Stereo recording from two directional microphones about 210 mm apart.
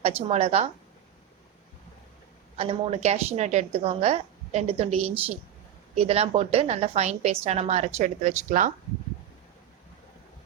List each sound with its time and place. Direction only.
0.3 s a woman's voice: 30° right (ahead or behind)
2.6 s a woman's voice: 30° right (ahead or behind)